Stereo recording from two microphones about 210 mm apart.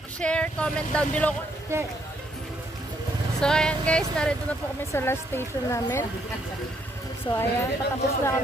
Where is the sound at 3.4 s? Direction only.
5° left (ahead or behind).